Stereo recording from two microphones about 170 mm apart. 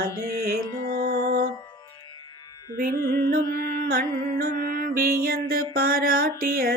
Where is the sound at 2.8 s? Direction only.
60° right (ahead or behind).